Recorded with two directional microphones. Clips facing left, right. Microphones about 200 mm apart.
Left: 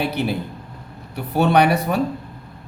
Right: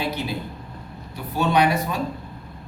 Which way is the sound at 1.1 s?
65° left (ahead or behind).